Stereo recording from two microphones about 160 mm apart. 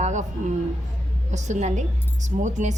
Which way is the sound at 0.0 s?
45° right (ahead or behind).